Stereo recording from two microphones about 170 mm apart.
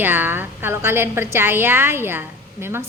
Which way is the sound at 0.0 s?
10° right (ahead or behind).